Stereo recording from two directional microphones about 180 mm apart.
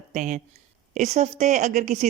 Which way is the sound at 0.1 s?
40° right (ahead or behind).